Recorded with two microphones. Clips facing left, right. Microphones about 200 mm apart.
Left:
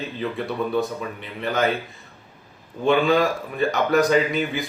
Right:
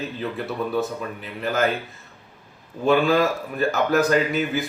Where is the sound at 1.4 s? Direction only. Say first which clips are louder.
Even; centre (ahead or behind).